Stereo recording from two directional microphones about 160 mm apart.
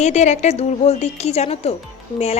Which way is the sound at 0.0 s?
45° left (ahead or behind).